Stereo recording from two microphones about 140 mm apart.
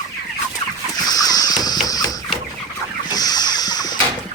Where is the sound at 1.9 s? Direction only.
25° left (ahead or behind).